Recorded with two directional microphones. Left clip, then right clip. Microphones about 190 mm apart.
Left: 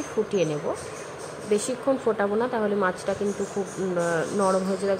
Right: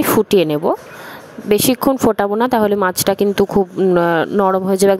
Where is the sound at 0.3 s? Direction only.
65° right (ahead or behind).